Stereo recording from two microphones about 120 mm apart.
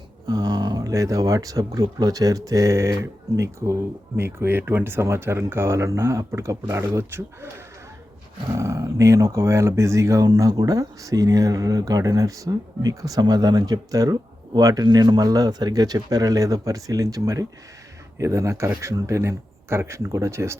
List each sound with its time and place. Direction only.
0.3 s speech: 35° right (ahead or behind)